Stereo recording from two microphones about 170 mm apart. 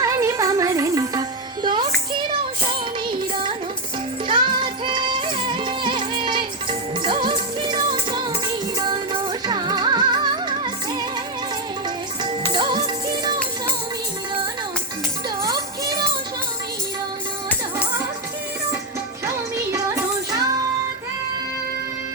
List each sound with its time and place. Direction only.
0.0 s music: 20° right (ahead or behind)
3.1 s music: 30° right (ahead or behind)
12.5 s music: 25° right (ahead or behind)
15.4 s music: 20° right (ahead or behind)